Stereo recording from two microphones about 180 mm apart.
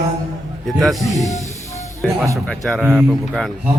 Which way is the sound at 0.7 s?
Centre (ahead or behind).